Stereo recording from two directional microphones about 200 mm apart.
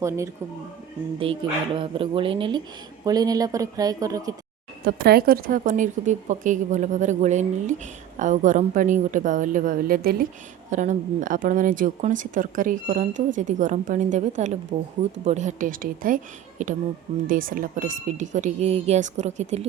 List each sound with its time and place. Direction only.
1.2 s speech: 25° right (ahead or behind)
4.9 s speech: 50° right (ahead or behind)
10.7 s speech: 40° right (ahead or behind)